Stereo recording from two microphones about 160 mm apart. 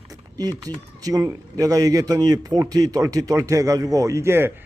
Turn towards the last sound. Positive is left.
turn(degrees=-15)  # may be behind; listen again after turning